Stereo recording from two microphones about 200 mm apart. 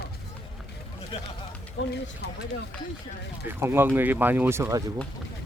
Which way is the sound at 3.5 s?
10° right (ahead or behind).